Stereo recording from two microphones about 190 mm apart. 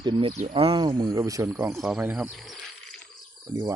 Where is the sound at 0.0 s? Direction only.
25° right (ahead or behind).